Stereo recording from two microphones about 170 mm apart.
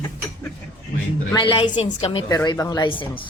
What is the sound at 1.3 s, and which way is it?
Speech, 30° left (ahead or behind).